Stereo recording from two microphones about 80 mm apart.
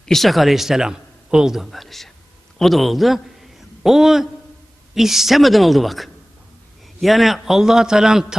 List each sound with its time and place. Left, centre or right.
0.0 s a man's voice: centre